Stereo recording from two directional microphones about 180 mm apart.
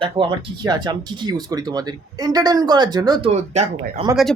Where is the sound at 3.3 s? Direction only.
35° right (ahead or behind).